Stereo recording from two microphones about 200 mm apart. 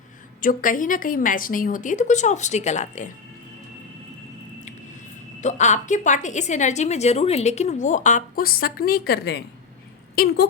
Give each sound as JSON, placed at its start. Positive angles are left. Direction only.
{"t": 0.4, "sound": "a woman's voice", "side_deg": 40}
{"t": 5.4, "sound": "a woman's voice", "side_deg": 35}